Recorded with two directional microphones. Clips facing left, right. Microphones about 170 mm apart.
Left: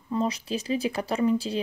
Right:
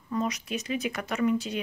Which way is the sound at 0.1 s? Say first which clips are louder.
Left 3 dB; 30° left (ahead or behind).